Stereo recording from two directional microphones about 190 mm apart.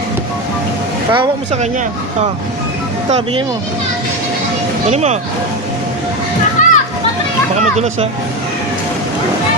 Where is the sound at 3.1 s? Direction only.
30° right (ahead or behind).